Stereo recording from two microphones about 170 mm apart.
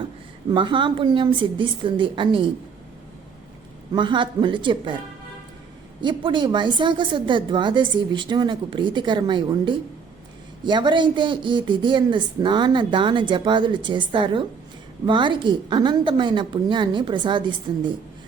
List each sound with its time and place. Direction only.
0.5 s speech: 30° right (ahead or behind)
3.9 s speech: 30° right (ahead or behind)
6.0 s speech: 25° right (ahead or behind)